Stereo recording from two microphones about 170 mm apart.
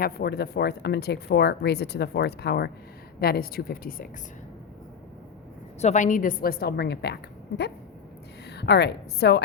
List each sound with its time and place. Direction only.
0.0 s a woman's voice: 65° left (ahead or behind)
5.8 s a woman's voice: 45° left (ahead or behind); by 9.4 s 80° left